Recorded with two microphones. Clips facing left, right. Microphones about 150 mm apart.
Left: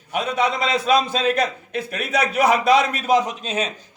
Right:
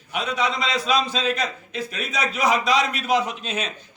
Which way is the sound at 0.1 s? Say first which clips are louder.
Left 3 dB; 50° left (ahead or behind).